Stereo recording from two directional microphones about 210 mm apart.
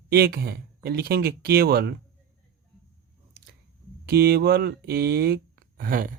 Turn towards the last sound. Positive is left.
turn(degrees=-40)  # may be behind; listen again after turning